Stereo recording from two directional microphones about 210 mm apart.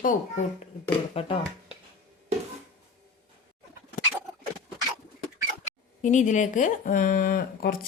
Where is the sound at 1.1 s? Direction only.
25° left (ahead or behind).